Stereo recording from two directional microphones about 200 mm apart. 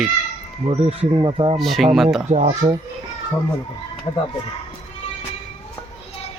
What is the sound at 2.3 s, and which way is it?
Speech, 35° right (ahead or behind).